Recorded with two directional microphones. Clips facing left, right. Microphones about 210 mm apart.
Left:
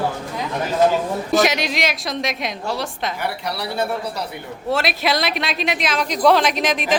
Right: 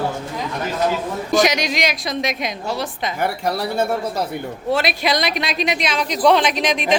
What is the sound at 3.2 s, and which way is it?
Speech, 45° right (ahead or behind).